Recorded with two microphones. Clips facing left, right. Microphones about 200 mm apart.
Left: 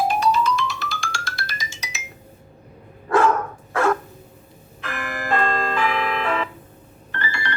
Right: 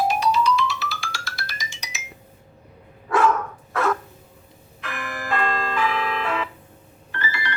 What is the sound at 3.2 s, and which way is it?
Dog, 30° left (ahead or behind).